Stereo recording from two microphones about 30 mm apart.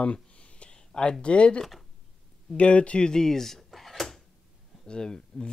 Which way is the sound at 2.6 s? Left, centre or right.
Left.